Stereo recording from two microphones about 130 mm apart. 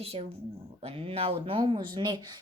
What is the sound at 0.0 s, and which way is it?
Speech, 50° right (ahead or behind).